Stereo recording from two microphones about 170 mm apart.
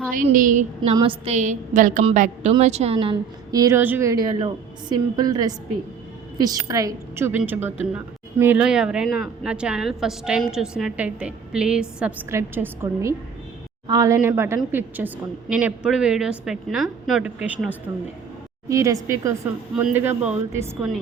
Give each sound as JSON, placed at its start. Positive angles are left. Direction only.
{"t": 0.1, "sound": "a woman's voice", "side_deg": -50}
{"t": 0.9, "sound": "a woman's voice", "side_deg": -35}